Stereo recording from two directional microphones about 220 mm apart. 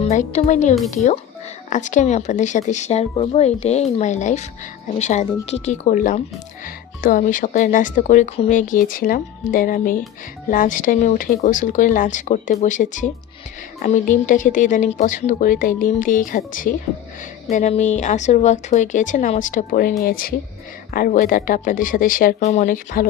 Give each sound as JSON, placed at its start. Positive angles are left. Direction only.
{"t": 0.0, "sound": "speech", "side_deg": 30}